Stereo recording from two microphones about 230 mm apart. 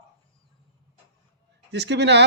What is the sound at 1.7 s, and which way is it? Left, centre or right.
Speech, right.